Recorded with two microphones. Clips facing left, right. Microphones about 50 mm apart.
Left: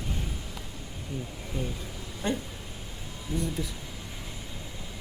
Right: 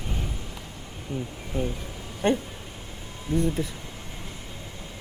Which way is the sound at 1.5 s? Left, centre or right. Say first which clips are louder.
Right 5 dB; right.